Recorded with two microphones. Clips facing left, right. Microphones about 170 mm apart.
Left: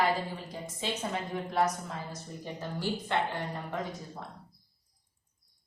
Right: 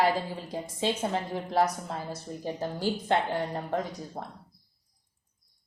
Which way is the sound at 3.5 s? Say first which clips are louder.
Right 5 dB; 40° right (ahead or behind).